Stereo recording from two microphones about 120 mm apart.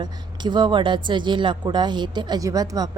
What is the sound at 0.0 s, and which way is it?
A woman's voice, 40° right (ahead or behind).